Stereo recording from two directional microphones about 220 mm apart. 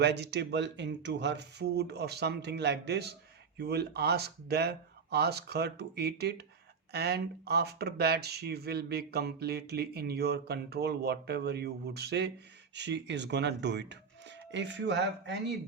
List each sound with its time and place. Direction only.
0.0 s speech: 50° right (ahead or behind)